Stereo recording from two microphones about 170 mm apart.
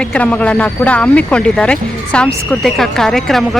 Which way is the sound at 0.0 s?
5° left (ahead or behind).